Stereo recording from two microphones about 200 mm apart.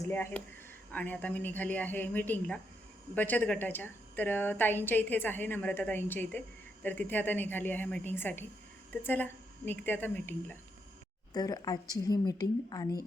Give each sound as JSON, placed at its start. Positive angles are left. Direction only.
{"t": 0.1, "sound": "a woman's voice", "side_deg": 10}